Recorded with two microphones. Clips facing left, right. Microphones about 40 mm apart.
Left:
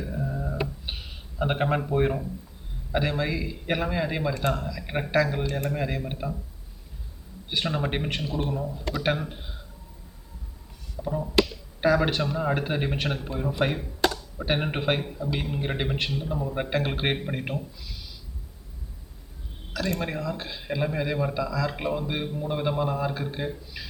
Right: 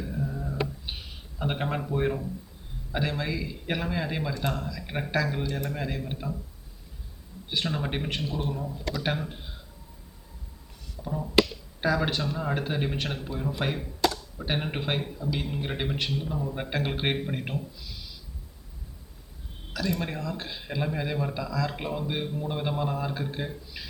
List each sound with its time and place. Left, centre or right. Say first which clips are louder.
0.0 s a sound: left 2 dB; centre
1.4 s a man's voice: left 5 dB; centre
5.4 s speech: left 2 dB; left
5.6 s speech: left 4 dB; centre
7.5 s speech: left 2 dB; centre
8.1 s a man's voice: left 2 dB; centre
8.9 s a man's voice: left 4 dB; left
9.1 s speech: left 1 dB; centre
11.0 s a man's voice: even; centre
20.0 s speech: left 2 dB; centre